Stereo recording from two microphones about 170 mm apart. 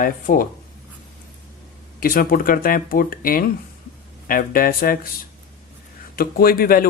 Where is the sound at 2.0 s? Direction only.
60° left (ahead or behind).